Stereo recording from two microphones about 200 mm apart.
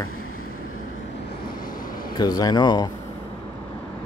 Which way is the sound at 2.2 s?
20° left (ahead or behind).